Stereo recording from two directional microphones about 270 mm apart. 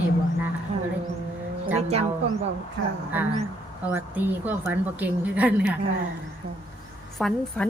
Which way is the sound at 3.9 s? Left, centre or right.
Centre.